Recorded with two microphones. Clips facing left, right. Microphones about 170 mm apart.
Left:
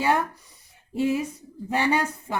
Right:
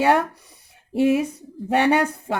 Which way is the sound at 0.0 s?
70° right (ahead or behind).